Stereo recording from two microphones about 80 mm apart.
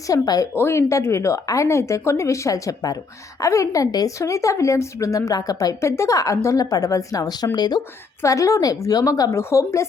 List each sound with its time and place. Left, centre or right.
0.1 s a woman's voice: left
0.5 s a woman's voice: left
8.2 s a woman's voice: left